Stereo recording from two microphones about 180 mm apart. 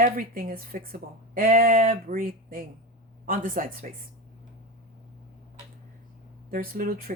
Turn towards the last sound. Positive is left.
turn(degrees=-55)  # may be behind; listen again after turning